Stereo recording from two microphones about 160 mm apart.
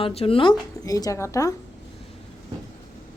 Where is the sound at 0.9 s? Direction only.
20° left (ahead or behind).